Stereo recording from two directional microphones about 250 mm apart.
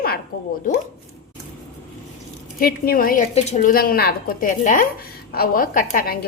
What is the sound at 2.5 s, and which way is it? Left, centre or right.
A woman's voice, left.